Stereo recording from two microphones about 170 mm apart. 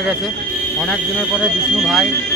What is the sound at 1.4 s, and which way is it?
Speech, centre (ahead or behind).